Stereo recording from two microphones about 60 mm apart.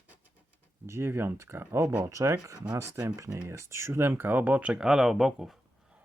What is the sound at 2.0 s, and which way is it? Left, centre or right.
Speech, right.